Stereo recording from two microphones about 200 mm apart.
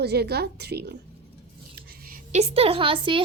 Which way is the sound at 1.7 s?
45° right (ahead or behind).